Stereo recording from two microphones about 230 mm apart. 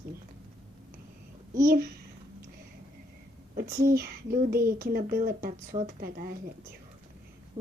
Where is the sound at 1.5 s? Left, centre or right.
Right.